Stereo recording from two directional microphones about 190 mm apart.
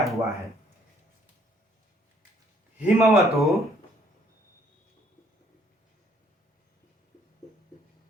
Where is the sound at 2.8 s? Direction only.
Centre (ahead or behind).